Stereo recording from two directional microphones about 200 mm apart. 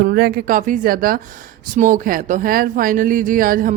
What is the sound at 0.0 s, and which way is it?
Speech, 50° right (ahead or behind).